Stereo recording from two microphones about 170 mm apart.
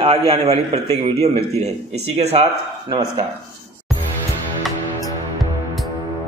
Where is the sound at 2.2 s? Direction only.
40° right (ahead or behind).